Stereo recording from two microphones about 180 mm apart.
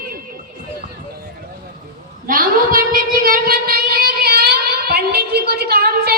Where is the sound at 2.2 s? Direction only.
50° right (ahead or behind).